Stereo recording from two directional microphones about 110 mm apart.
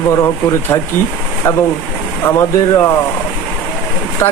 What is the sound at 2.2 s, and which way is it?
Speech, 20° left (ahead or behind).